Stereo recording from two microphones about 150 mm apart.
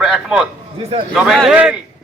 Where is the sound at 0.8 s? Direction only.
40° right (ahead or behind).